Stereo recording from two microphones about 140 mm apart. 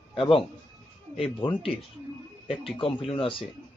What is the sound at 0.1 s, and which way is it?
Speech, 40° left (ahead or behind).